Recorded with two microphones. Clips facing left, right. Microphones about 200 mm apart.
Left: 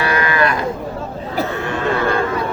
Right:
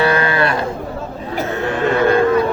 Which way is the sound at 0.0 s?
30° right (ahead or behind).